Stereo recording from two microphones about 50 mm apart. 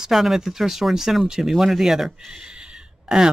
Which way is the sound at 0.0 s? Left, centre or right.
Centre.